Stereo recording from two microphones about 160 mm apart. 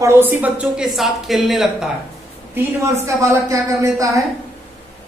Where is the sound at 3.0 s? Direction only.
20° right (ahead or behind).